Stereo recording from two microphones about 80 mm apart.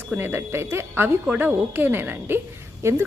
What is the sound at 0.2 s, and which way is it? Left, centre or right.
A woman's voice, right.